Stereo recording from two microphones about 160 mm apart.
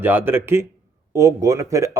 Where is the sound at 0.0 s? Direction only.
15° right (ahead or behind).